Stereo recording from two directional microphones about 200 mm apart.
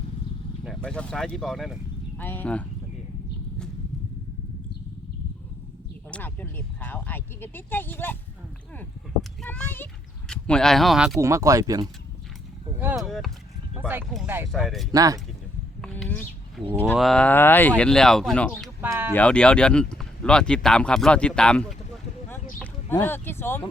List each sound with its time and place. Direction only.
0.6 s speech: centre (ahead or behind)
6.1 s speech: 10° left (ahead or behind)
9.4 s speech: 5° left (ahead or behind)
11.2 s speech: 15° right (ahead or behind)
12.8 s speech: 5° right (ahead or behind)
14.3 s speech: 10° right (ahead or behind)
14.5 s speech: centre (ahead or behind)
14.9 s speech: 15° right (ahead or behind)
15.8 s bird: 5° left (ahead or behind)
16.9 s speech: 5° left (ahead or behind)
18.8 s speech: 10° right (ahead or behind)
19.1 s speech: 5° left (ahead or behind)
22.5 s a sound: 10° left (ahead or behind)